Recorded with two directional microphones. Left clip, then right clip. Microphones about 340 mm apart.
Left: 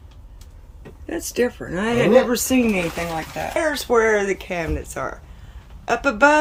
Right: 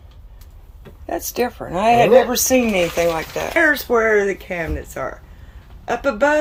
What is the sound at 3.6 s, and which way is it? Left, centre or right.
A man's voice, centre.